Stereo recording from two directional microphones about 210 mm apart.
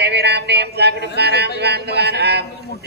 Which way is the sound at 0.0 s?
50° right (ahead or behind).